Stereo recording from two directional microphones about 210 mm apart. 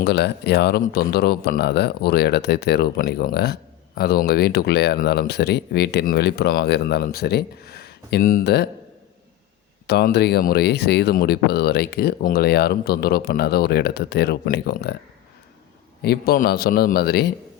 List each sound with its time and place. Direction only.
0.0 s speech: 50° left (ahead or behind)
9.8 s speech: 50° left (ahead or behind)
16.0 s speech: 45° left (ahead or behind)